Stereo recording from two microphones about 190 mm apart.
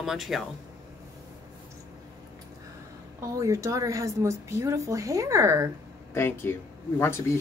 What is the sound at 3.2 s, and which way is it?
A woman's voice, 15° right (ahead or behind).